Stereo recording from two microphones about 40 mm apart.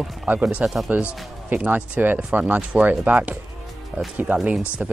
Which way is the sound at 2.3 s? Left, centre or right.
Right.